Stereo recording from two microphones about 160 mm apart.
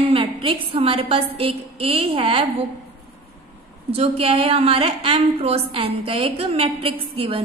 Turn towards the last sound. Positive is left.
turn(degrees=-35)  # may be behind; listen again after turning